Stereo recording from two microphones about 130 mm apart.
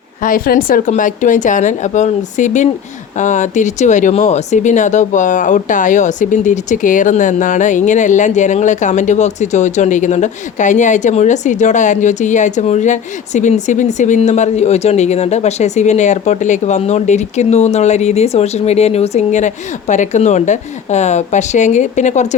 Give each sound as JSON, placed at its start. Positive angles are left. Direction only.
{"t": 0.2, "sound": "speech", "side_deg": 90}